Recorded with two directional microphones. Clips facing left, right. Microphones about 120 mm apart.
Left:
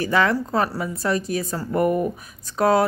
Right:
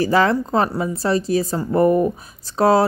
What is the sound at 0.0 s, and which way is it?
Speech, 35° right (ahead or behind).